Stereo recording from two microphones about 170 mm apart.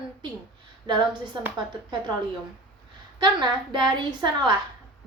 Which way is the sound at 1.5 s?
25° right (ahead or behind).